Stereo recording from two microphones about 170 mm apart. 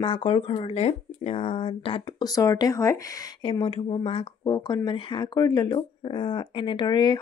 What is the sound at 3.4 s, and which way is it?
Speech, 30° left (ahead or behind).